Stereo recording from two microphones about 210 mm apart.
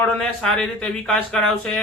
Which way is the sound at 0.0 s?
5° left (ahead or behind).